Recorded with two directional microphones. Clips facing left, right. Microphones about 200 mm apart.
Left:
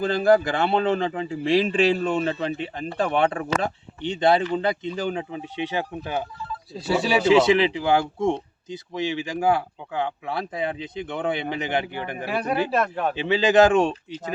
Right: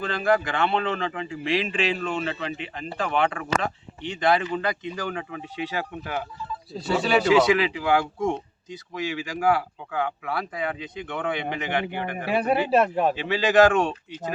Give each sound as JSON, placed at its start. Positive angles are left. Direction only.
{"t": 0.0, "sound": "speech", "side_deg": 35}
{"t": 6.7, "sound": "speech", "side_deg": 10}
{"t": 7.3, "sound": "speech", "side_deg": 25}
{"t": 12.5, "sound": "speech", "side_deg": -30}
{"t": 12.8, "sound": "a man's voice", "side_deg": -5}
{"t": 13.2, "sound": "speech", "side_deg": 25}